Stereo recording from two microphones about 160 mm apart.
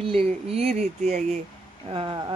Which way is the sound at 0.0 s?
35° right (ahead or behind).